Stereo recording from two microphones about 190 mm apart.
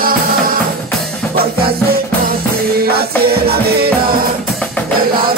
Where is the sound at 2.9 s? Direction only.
55° right (ahead or behind).